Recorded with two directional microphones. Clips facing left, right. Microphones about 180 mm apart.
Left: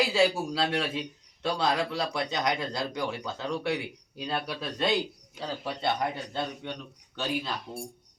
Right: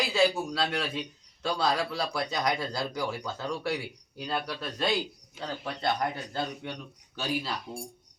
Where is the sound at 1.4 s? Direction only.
20° left (ahead or behind).